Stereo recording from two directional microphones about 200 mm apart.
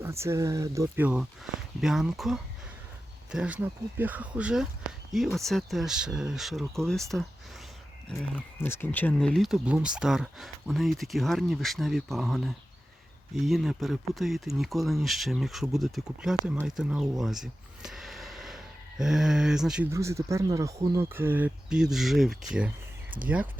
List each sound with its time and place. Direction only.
0.0 s speech: 15° right (ahead or behind)
19.9 s speech: 15° right (ahead or behind)
23.1 s speech: 25° right (ahead or behind)